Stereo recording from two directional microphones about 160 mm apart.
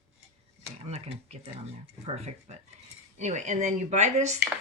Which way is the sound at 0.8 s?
40° right (ahead or behind).